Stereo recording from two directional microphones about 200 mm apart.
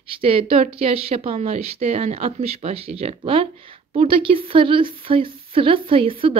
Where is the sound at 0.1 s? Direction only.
25° right (ahead or behind).